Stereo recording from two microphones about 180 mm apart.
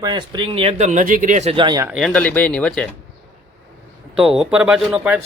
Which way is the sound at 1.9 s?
Centre (ahead or behind).